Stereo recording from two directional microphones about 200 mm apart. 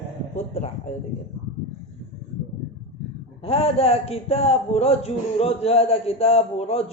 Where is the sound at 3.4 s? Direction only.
30° left (ahead or behind).